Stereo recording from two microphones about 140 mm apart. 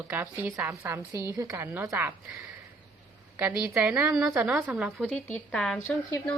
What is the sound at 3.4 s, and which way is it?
A woman's voice, 5° right (ahead or behind).